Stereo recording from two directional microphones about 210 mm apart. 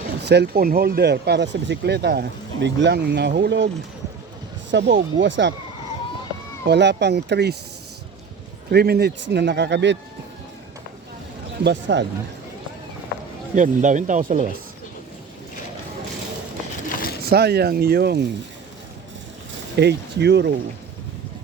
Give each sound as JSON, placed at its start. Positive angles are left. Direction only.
{"t": 0.2, "sound": "speech", "side_deg": -55}
{"t": 4.7, "sound": "speech", "side_deg": -55}
{"t": 6.7, "sound": "speech", "side_deg": -55}
{"t": 8.7, "sound": "speech", "side_deg": -50}
{"t": 11.6, "sound": "speech", "side_deg": -55}
{"t": 13.6, "sound": "speech", "side_deg": -35}
{"t": 16.9, "sound": "a sound", "side_deg": 45}
{"t": 17.2, "sound": "speech", "side_deg": -50}
{"t": 19.7, "sound": "speech", "side_deg": -55}